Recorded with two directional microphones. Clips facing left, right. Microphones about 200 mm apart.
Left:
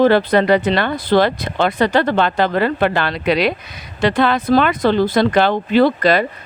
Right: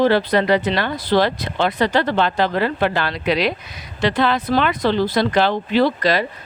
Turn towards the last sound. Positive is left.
turn(degrees=55)  # may be behind; listen again after turning